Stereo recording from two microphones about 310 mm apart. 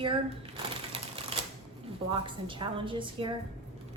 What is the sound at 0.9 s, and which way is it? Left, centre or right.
Typewriter, centre.